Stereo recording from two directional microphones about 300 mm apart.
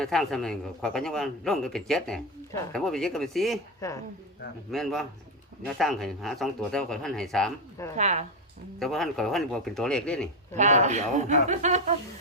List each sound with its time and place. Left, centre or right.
0.0 s speech: centre
7.9 s a man's voice: right
8.8 s speech: centre
10.5 s a man's voice: right